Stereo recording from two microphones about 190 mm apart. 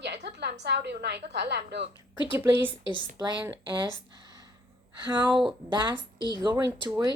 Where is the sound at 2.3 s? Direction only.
10° right (ahead or behind).